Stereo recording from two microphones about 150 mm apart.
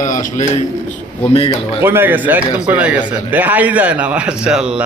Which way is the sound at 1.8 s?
15° right (ahead or behind).